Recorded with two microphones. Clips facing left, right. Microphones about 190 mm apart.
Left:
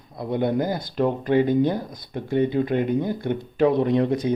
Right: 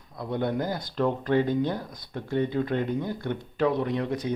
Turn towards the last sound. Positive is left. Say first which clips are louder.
# left 7 dB
turn(degrees=25)  # may be behind; listen again after turning